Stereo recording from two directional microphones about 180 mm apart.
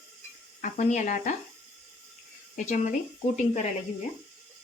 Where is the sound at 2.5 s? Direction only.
45° left (ahead or behind).